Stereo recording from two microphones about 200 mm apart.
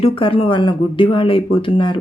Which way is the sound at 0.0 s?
25° left (ahead or behind).